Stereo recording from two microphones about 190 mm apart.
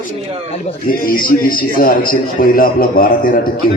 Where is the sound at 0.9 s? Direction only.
50° left (ahead or behind).